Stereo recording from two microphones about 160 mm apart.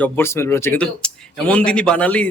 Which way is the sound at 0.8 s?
5° left (ahead or behind).